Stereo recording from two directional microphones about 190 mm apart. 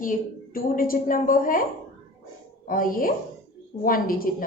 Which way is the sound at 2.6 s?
45° left (ahead or behind).